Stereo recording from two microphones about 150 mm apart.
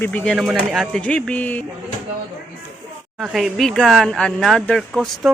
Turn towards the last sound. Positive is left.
turn(degrees=0)  # may be behind; listen again after turning